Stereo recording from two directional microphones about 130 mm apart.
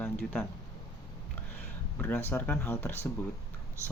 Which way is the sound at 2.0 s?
15° left (ahead or behind).